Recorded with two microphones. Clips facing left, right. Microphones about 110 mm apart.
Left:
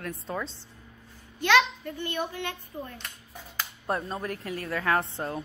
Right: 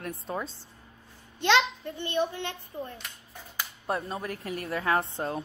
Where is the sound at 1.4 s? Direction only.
25° right (ahead or behind).